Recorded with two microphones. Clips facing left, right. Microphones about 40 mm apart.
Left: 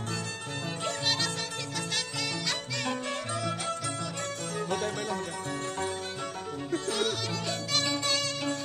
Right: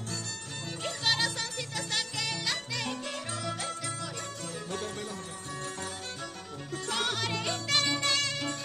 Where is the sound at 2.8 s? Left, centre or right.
Centre.